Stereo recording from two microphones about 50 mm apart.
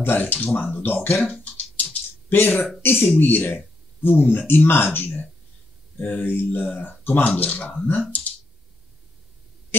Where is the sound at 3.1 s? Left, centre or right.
Left.